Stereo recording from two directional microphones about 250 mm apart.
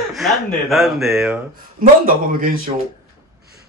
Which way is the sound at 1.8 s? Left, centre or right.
Right.